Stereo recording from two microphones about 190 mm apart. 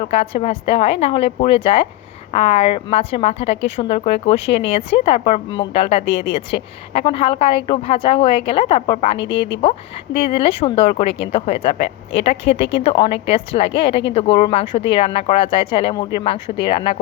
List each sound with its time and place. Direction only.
0.0 s a woman's voice: 30° left (ahead or behind)
10.2 s a woman's voice: 30° left (ahead or behind)